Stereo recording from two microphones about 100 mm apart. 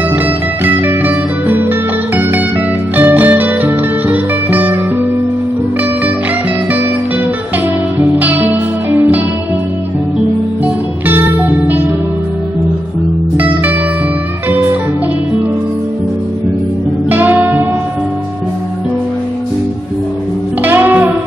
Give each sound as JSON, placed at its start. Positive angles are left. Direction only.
{"t": 0.7, "sound": "music", "side_deg": -20}
{"t": 8.2, "sound": "music", "side_deg": -20}
{"t": 10.6, "sound": "music", "side_deg": -20}
{"t": 17.1, "sound": "music", "side_deg": -20}
{"t": 20.6, "sound": "music", "side_deg": -20}